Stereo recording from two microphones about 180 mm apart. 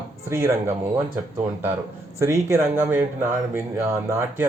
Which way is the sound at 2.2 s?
15° right (ahead or behind).